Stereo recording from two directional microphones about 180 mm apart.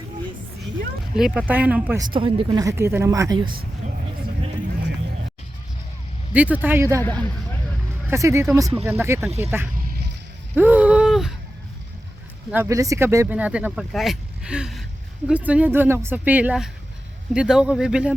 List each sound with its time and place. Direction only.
1.1 s speech: 5° right (ahead or behind)
2.0 s speech: 25° right (ahead or behind)
6.3 s speech: 10° right (ahead or behind)
7.0 s speech: 10° left (ahead or behind)
8.0 s speech: 15° right (ahead or behind)
10.5 s a sound: 10° right (ahead or behind)
12.5 s speech: 15° right (ahead or behind)